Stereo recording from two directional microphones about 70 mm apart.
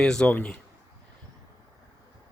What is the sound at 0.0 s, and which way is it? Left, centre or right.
Speech, centre.